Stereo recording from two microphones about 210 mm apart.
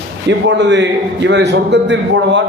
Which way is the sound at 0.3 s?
60° right (ahead or behind).